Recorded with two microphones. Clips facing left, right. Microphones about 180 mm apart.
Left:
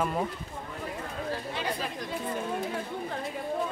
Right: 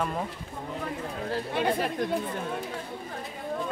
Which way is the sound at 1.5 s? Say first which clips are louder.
Right 7 dB; 55° right (ahead or behind).